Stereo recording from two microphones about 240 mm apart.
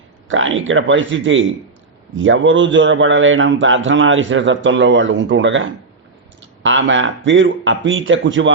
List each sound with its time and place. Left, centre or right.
0.3 s a man's voice: right